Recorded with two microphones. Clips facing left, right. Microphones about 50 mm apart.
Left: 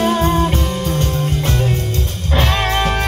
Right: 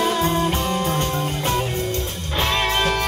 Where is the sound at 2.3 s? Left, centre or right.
Left.